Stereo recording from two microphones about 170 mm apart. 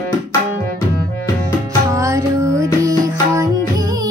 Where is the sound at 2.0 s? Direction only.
20° right (ahead or behind).